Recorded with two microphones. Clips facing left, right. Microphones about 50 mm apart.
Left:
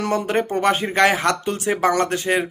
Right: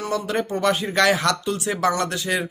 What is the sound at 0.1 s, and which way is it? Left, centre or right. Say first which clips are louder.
Speech: left 2 dB; left.